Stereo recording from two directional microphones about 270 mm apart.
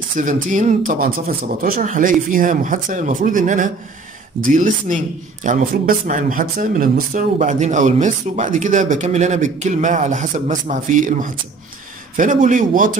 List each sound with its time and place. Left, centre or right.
0.2 s speech: right